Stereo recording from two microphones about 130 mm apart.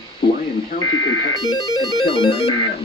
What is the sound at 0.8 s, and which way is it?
Buzzer, 30° left (ahead or behind).